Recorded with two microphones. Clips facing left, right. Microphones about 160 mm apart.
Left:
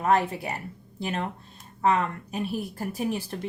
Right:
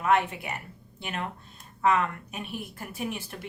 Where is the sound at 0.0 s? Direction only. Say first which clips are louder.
Left 2 dB; 35° left (ahead or behind).